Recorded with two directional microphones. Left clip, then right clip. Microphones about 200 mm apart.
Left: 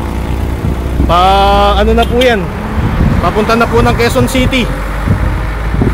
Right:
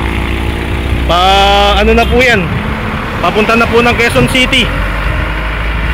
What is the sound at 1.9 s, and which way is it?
Speech, 15° right (ahead or behind).